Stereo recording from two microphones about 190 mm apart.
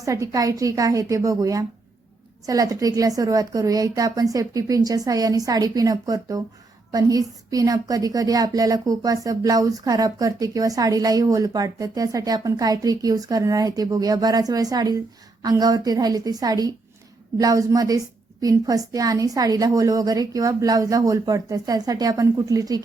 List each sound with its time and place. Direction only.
0.0 s a woman's voice: 15° right (ahead or behind)